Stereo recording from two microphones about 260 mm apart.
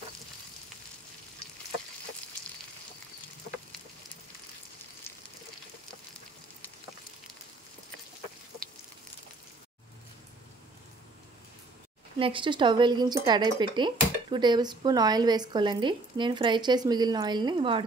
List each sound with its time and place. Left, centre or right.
12.2 s speech: centre